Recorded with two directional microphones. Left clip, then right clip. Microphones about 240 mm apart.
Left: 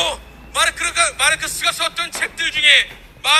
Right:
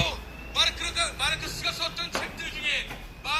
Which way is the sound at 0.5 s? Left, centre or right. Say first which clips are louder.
Left 7 dB; left.